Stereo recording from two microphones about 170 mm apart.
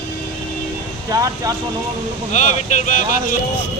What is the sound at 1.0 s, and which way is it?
Speech, 20° right (ahead or behind).